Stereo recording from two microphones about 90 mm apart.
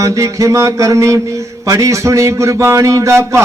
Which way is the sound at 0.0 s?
35° right (ahead or behind).